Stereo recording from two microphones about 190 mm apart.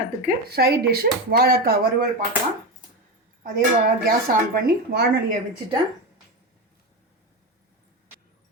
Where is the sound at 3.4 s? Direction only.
50° right (ahead or behind).